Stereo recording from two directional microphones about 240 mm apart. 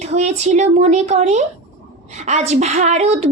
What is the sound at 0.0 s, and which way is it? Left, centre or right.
A woman's voice, right.